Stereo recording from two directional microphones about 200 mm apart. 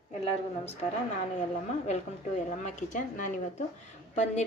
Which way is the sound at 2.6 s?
40° left (ahead or behind).